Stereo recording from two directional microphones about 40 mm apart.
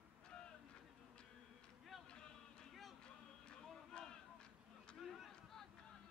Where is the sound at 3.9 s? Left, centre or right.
Left.